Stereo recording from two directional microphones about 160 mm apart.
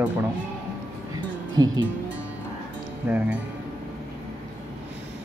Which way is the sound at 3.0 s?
10° right (ahead or behind).